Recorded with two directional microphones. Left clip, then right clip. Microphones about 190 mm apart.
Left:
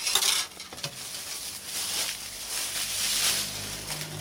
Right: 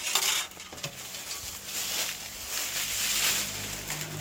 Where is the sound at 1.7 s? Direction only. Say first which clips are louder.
Left 1 dB; 10° right (ahead or behind).